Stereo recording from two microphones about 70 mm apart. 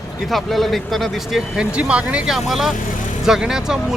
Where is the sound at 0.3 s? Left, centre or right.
Centre.